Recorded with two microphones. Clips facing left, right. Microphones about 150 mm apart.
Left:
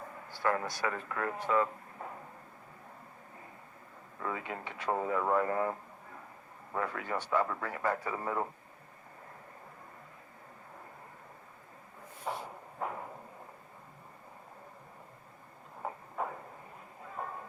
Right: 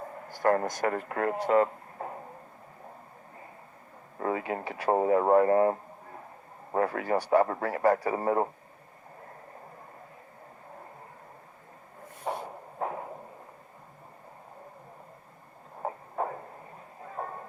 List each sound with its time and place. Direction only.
0.3 s speech: 45° right (ahead or behind)
4.2 s a man's voice: 40° right (ahead or behind)
6.7 s a man's voice: 35° right (ahead or behind)
15.8 s heart murmur: 40° right (ahead or behind)
17.2 s a sound: 40° right (ahead or behind)